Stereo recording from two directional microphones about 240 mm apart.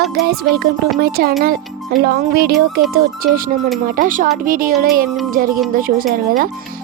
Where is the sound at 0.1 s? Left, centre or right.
Right.